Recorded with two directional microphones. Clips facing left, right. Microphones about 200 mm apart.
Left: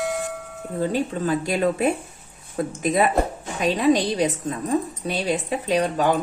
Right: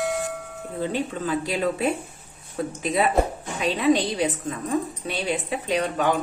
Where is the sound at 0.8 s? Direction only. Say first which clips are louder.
Left 3 dB; 40° left (ahead or behind).